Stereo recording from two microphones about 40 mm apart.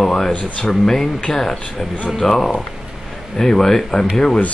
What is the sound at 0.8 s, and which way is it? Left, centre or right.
Speech, centre.